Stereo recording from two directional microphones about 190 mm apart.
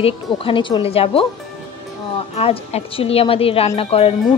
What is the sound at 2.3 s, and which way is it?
A woman's voice, 30° left (ahead or behind).